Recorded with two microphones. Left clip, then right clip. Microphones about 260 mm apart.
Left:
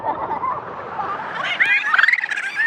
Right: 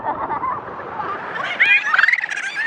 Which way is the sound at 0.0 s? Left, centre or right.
Left.